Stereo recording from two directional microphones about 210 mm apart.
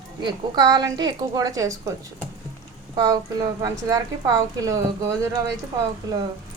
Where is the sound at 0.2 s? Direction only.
20° right (ahead or behind).